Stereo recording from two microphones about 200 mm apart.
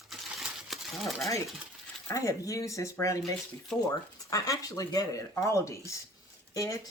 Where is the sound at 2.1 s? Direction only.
15° left (ahead or behind).